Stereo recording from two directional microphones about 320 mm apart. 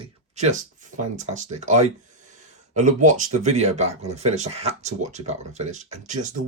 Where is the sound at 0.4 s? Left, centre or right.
Right.